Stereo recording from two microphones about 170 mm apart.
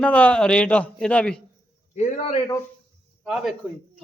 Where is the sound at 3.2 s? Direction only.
5° right (ahead or behind).